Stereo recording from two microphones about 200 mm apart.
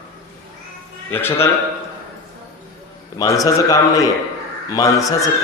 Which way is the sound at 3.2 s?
15° left (ahead or behind).